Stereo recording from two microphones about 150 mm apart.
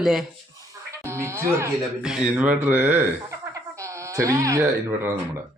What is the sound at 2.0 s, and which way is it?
Speech, 5° right (ahead or behind).